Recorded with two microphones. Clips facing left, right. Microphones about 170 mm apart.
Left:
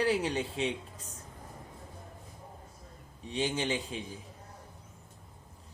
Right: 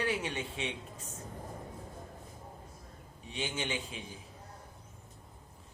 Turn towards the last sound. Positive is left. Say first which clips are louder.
# left 5 dB
turn(degrees=35)  # may be behind; listen again after turning